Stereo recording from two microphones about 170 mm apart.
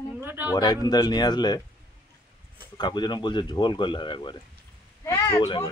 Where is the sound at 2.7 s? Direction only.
25° left (ahead or behind).